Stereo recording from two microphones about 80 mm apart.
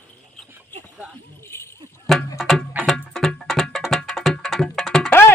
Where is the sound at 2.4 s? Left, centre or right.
Centre.